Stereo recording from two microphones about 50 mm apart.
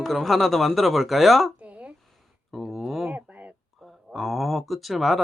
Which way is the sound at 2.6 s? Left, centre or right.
Centre.